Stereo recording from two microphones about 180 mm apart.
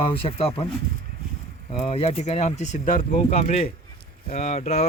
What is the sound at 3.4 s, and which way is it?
Speech, 35° left (ahead or behind).